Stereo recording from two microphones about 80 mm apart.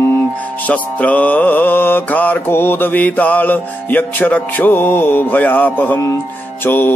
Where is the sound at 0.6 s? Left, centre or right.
Centre.